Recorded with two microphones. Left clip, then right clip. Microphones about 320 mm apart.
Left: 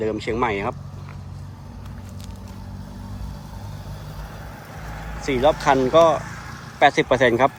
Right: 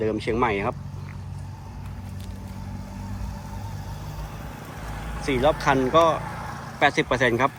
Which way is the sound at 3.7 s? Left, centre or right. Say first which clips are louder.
Even; right.